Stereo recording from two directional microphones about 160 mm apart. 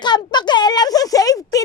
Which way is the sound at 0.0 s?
25° left (ahead or behind).